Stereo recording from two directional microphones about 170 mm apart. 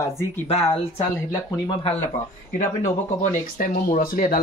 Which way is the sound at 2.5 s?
45° left (ahead or behind).